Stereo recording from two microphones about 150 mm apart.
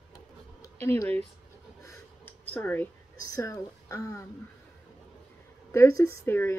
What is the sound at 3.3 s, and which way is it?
Speech, 20° left (ahead or behind).